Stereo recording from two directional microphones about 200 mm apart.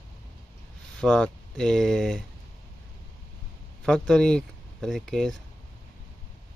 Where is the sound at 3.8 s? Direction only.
5° left (ahead or behind).